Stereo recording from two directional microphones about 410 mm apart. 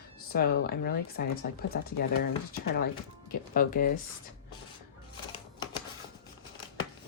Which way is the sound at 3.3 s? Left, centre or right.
Centre.